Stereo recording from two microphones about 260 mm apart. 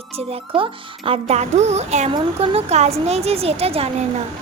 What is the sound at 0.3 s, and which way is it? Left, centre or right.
Speech, centre.